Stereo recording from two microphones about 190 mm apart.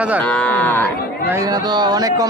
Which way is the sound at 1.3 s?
20° right (ahead or behind).